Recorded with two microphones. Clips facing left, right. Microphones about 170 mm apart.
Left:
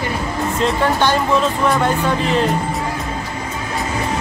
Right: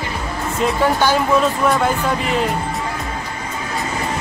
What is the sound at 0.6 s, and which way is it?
Speech, 5° right (ahead or behind).